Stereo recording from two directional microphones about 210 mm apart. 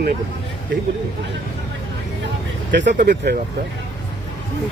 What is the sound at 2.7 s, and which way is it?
Speech, 55° right (ahead or behind).